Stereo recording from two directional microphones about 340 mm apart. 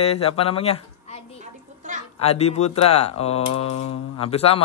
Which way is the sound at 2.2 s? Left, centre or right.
Centre.